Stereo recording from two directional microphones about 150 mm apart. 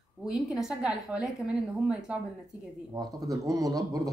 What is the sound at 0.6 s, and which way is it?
A woman's voice, 5° right (ahead or behind).